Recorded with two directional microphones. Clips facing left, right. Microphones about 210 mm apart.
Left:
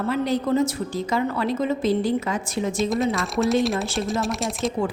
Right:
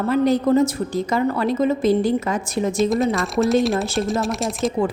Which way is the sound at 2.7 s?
Centre (ahead or behind).